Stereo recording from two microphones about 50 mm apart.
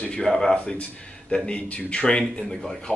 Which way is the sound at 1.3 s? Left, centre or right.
Left.